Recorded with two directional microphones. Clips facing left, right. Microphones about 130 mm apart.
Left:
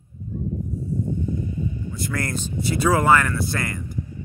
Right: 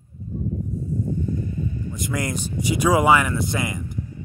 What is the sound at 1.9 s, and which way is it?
Speech, 15° right (ahead or behind).